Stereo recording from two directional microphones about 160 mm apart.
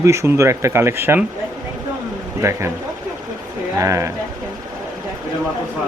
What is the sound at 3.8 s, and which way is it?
Speech, 20° right (ahead or behind).